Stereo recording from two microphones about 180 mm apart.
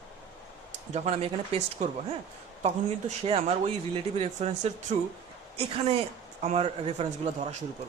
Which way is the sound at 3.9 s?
35° right (ahead or behind).